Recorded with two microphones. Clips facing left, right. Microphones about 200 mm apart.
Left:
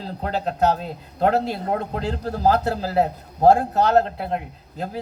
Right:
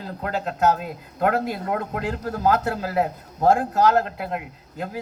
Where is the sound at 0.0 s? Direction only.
30° left (ahead or behind).